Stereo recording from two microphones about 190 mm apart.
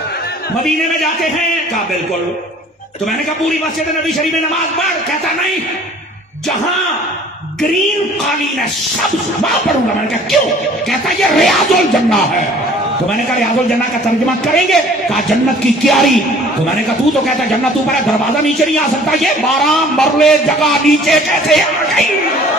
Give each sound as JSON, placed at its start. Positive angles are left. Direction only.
{"t": 11.2, "sound": "a man's voice", "side_deg": 0}
{"t": 14.5, "sound": "a man's voice", "side_deg": 0}
{"t": 19.2, "sound": "a man's voice", "side_deg": 0}